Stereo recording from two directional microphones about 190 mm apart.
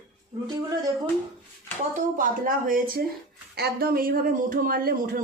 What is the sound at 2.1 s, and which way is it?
Speech, 45° right (ahead or behind).